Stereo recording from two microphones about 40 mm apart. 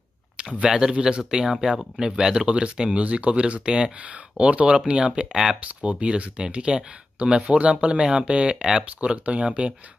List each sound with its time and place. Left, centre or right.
0.4 s speech: right